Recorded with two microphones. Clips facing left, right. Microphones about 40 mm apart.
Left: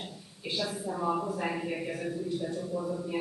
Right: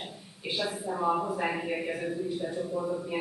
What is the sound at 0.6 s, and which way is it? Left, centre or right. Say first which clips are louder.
Speech: right 2 dB; centre.